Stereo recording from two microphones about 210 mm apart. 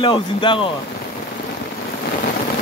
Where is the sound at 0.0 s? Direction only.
25° left (ahead or behind).